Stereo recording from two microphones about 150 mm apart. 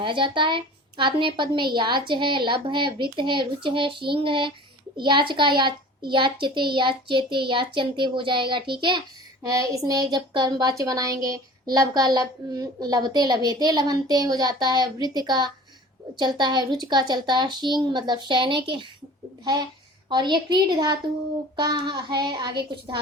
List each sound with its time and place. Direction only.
0.0 s a child's voice: 35° right (ahead or behind)
9.4 s a woman's voice: 20° right (ahead or behind)
20.1 s a child's voice: 30° right (ahead or behind)